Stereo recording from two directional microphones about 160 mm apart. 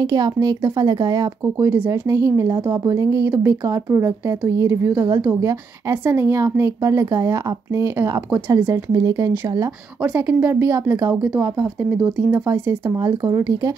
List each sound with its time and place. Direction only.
0.0 s a woman's voice: 25° right (ahead or behind)
10.0 s a woman's voice: 10° right (ahead or behind)